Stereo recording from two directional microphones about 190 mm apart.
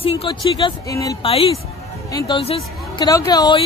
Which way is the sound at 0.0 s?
30° left (ahead or behind).